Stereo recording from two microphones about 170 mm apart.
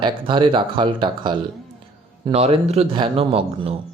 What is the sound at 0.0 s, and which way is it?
Speech, 30° right (ahead or behind).